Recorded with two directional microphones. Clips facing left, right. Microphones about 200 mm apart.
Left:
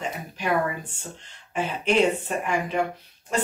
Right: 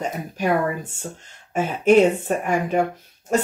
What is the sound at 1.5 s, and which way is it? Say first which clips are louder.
Speech: right 7 dB; 45° right (ahead or behind).